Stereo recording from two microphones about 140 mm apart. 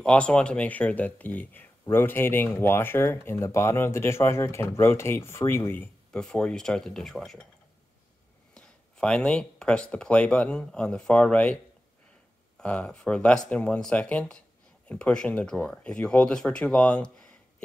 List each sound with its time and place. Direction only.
0.0 s speech: 5° left (ahead or behind)
8.5 s speech: 5° left (ahead or behind)
12.5 s speech: 5° left (ahead or behind)